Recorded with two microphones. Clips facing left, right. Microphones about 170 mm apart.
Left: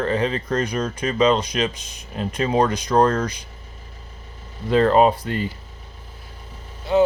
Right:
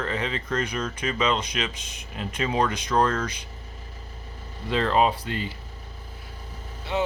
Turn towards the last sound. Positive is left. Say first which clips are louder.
# left 9 dB
turn(degrees=40)  # may be behind; listen again after turning